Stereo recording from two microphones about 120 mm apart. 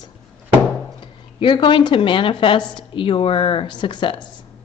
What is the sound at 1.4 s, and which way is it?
Speech, 45° left (ahead or behind).